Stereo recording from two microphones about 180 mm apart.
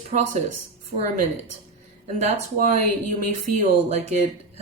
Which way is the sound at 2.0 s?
40° right (ahead or behind).